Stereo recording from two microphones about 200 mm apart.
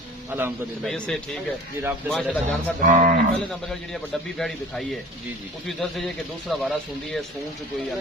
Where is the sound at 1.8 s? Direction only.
10° right (ahead or behind).